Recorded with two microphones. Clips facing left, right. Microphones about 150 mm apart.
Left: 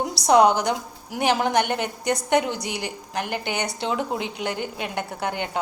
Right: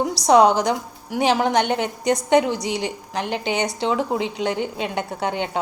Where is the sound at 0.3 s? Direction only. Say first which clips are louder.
Right 2 dB; 75° right (ahead or behind).